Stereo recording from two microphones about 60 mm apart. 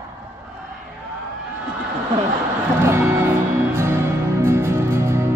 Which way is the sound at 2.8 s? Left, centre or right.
Right.